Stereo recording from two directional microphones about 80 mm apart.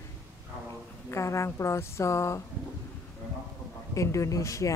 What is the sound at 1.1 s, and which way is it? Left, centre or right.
A woman's voice, left.